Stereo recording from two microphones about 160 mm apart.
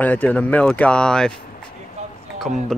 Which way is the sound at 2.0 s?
45° right (ahead or behind).